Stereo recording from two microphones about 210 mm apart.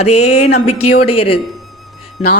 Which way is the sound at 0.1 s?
90° left.